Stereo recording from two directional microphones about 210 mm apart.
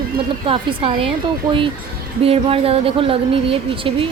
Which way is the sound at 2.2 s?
25° right (ahead or behind).